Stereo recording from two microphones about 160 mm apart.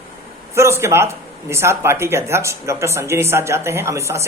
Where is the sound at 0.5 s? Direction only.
15° right (ahead or behind).